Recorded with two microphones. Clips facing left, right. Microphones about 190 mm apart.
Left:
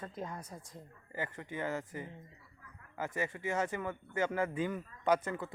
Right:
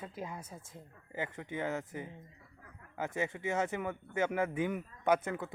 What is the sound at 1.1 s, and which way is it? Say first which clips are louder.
Speech: right 1 dB; 15° right (ahead or behind).